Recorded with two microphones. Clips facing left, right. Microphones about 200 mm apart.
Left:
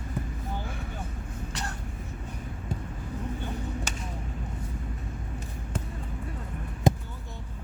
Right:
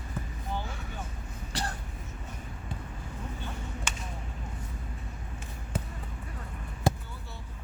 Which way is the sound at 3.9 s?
40° left (ahead or behind).